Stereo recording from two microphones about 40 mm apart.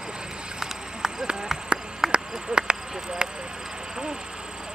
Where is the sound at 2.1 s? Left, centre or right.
Right.